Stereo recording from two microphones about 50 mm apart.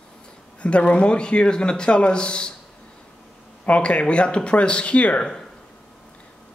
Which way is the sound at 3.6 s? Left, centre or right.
Left.